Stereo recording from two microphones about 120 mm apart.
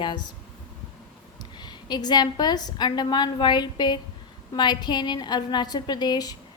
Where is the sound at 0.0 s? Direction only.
40° left (ahead or behind).